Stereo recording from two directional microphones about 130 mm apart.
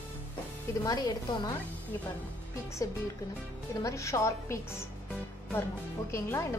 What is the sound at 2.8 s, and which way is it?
Speech, 25° left (ahead or behind).